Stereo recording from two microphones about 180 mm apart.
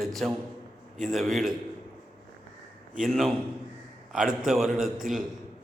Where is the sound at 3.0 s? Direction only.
Centre (ahead or behind).